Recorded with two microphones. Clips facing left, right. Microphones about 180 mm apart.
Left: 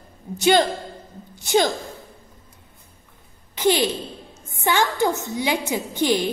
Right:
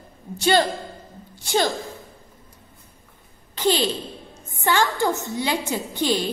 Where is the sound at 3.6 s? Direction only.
15° left (ahead or behind).